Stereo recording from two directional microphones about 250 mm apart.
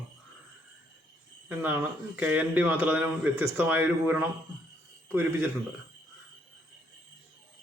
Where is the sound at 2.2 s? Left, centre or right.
Centre.